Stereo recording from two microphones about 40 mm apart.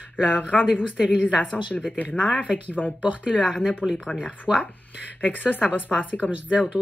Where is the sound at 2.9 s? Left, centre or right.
Right.